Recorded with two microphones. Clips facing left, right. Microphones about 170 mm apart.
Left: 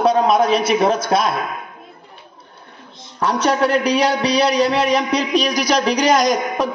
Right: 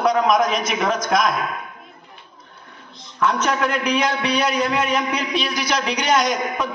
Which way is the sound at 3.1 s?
35° left (ahead or behind).